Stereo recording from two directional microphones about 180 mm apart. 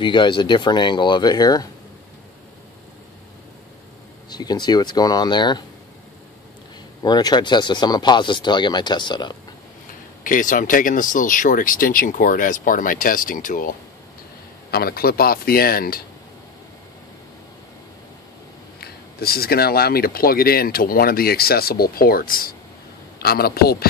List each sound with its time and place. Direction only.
0.0 s speech: 25° left (ahead or behind)
4.3 s speech: 20° left (ahead or behind)
7.0 s speech: 20° left (ahead or behind)
10.2 s speech: 50° left (ahead or behind)
18.8 s speech: 60° left (ahead or behind)